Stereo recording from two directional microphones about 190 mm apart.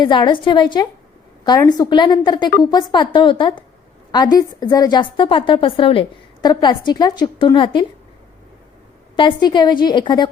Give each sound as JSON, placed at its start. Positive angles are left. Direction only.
{"t": 0.0, "sound": "a woman's voice", "side_deg": 25}
{"t": 9.1, "sound": "a woman's voice", "side_deg": 25}